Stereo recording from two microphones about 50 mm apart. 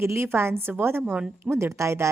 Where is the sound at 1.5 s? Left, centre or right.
Right.